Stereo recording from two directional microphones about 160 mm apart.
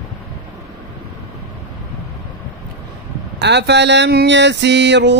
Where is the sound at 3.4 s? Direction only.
90° right.